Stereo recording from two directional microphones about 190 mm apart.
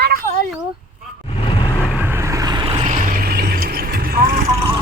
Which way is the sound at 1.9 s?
10° right (ahead or behind).